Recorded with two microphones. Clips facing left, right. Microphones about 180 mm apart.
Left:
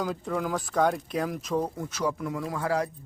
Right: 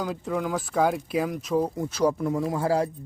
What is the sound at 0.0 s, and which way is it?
Speech, centre (ahead or behind).